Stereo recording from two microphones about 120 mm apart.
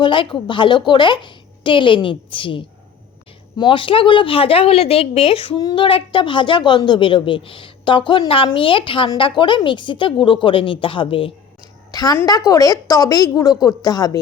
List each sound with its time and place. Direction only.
0.0 s a woman's voice: 45° left (ahead or behind)
5.5 s a woman's voice: 35° left (ahead or behind)
11.9 s a woman's voice: 30° left (ahead or behind)